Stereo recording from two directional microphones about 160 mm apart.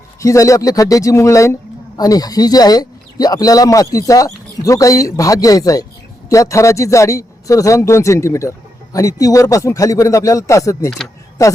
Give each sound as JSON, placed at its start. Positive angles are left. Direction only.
{"t": 0.2, "sound": "a man's voice", "side_deg": 20}